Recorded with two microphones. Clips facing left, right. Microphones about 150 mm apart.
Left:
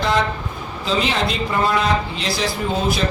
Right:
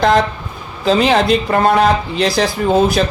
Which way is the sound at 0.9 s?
60° right (ahead or behind).